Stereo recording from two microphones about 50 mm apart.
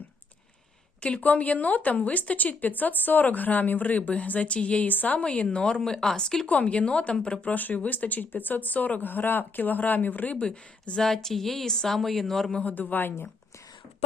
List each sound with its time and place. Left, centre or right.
1.0 s speech: left
6.5 s a woman's voice: left
7.4 s speech: left
10.3 s a woman's voice: left
11.0 s speech: centre
12.5 s a woman's voice: left
12.7 s speech: left